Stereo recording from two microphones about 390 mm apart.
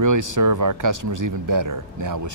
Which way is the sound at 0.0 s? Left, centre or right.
Right.